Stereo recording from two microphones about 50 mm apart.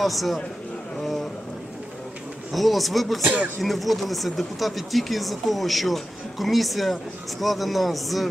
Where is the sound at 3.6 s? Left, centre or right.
Centre.